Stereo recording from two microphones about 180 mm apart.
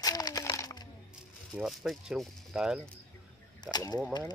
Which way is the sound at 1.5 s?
5° right (ahead or behind).